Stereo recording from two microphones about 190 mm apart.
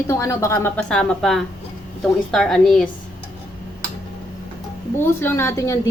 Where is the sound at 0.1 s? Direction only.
15° left (ahead or behind).